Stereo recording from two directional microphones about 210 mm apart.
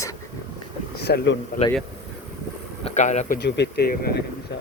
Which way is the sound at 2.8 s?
35° left (ahead or behind).